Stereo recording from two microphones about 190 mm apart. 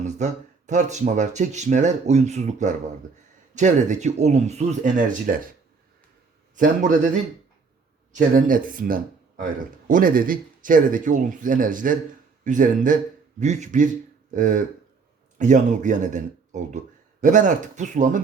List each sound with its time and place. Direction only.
0.7 s speech: 40° right (ahead or behind)
6.6 s speech: 40° right (ahead or behind)
8.1 s speech: 45° right (ahead or behind)